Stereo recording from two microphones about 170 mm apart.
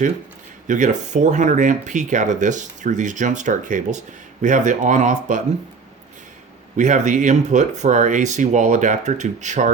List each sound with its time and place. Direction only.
0.7 s speech: 45° right (ahead or behind)
6.7 s speech: 45° right (ahead or behind)